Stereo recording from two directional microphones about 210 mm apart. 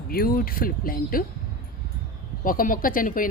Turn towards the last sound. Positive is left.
turn(degrees=40)  # may be behind; listen again after turning